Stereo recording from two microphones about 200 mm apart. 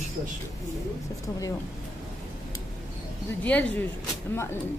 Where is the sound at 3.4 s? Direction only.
5° left (ahead or behind).